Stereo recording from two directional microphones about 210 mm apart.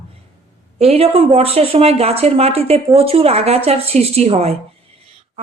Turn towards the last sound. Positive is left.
turn(degrees=-30)  # may be behind; listen again after turning